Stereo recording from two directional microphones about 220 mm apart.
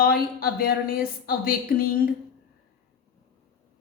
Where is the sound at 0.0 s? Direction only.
45° left (ahead or behind).